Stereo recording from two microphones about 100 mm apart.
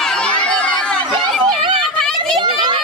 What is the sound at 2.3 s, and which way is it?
Children playing, 55° right (ahead or behind).